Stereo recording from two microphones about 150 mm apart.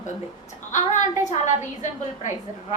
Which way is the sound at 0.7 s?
55° left (ahead or behind).